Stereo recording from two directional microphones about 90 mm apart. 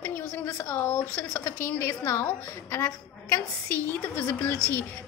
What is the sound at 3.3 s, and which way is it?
A woman's voice, 25° left (ahead or behind).